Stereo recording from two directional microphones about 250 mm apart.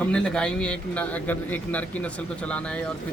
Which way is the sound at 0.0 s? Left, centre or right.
Centre.